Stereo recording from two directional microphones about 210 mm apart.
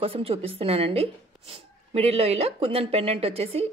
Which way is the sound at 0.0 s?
25° right (ahead or behind).